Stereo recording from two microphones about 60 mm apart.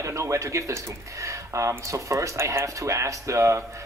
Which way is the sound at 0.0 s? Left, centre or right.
Right.